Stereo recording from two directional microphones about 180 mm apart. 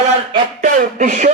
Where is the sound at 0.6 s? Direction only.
45° right (ahead or behind).